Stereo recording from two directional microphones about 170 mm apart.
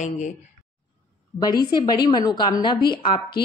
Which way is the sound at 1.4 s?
25° left (ahead or behind).